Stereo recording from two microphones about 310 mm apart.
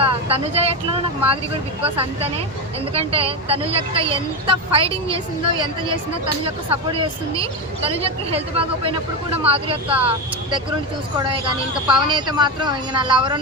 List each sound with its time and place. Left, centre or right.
0.0 s speech: centre
11.2 s speech: centre